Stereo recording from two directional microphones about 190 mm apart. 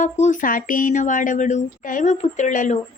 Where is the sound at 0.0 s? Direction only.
40° left (ahead or behind).